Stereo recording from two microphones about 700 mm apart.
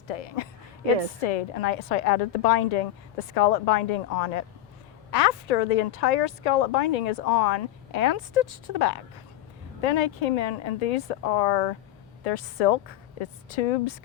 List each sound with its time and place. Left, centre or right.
0.1 s a woman's voice: left